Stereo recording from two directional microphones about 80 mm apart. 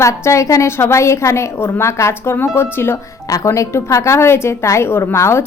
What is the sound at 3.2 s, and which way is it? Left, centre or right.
A woman's voice, left.